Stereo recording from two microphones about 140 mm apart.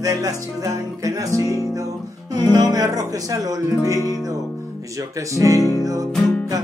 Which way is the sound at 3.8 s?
20° left (ahead or behind).